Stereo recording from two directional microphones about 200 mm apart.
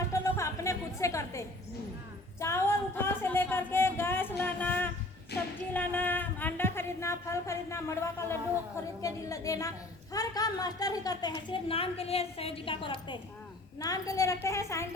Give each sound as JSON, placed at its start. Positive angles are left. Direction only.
{"t": 0.1, "sound": "music", "side_deg": 15}
{"t": 2.4, "sound": "a sound", "side_deg": 15}
{"t": 5.3, "sound": "basketball bounce", "side_deg": 55}
{"t": 5.7, "sound": "a woman's voice", "side_deg": 10}